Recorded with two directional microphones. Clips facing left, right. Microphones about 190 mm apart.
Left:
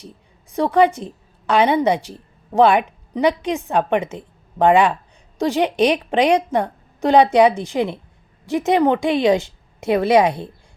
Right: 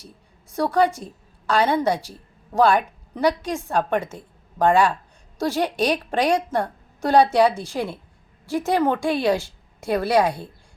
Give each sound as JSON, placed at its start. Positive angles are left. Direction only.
{"t": 0.5, "sound": "a woman's voice", "side_deg": 20}